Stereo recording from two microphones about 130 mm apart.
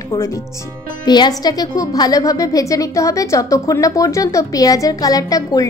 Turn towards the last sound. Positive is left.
turn(degrees=30)  # may be behind; listen again after turning